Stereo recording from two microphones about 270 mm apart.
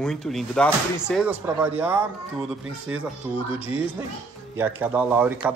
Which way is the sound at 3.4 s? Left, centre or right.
Left.